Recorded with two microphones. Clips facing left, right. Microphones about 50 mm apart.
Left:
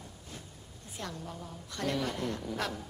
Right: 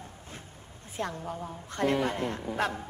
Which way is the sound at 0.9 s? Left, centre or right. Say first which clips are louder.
Right 7 dB; right.